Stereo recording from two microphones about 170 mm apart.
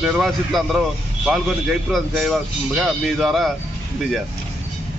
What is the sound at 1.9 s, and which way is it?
Speech, centre (ahead or behind).